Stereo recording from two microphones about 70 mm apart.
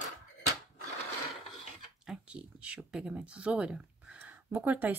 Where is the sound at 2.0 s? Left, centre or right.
Centre.